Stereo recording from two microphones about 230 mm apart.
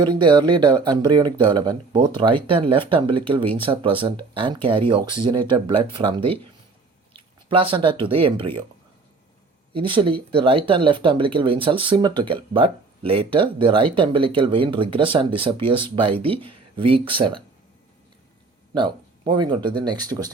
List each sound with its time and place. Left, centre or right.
0.0 s speech: centre
9.7 s speech: right
18.7 s a sound: centre
19.5 s speech: centre